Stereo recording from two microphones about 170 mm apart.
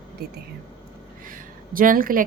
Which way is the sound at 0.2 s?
70° right (ahead or behind).